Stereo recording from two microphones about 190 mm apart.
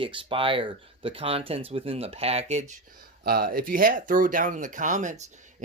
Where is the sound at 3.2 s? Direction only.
55° right (ahead or behind).